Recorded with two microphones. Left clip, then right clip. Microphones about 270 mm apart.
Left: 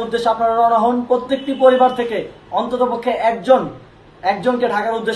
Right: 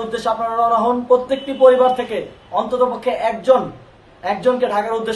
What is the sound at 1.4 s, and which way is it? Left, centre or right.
A man's voice, centre.